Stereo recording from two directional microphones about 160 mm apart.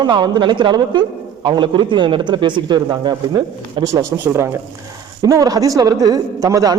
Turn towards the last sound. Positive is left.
turn(degrees=-20)  # may be behind; listen again after turning